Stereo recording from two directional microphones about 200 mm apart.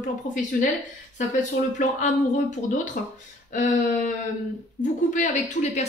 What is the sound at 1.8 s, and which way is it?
A woman's voice, 40° left (ahead or behind).